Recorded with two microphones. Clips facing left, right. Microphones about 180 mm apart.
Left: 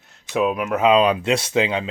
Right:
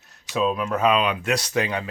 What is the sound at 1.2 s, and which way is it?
Speech, 25° left (ahead or behind).